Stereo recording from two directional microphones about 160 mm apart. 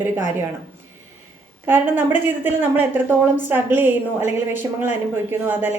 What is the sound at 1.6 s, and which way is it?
A woman's voice, 10° right (ahead or behind).